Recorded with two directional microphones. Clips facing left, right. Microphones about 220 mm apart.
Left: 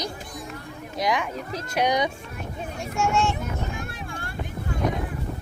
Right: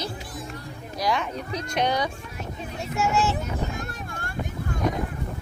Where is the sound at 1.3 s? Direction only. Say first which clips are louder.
Even; centre (ahead or behind).